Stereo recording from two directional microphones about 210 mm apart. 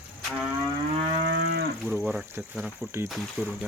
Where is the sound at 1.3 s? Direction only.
55° right (ahead or behind).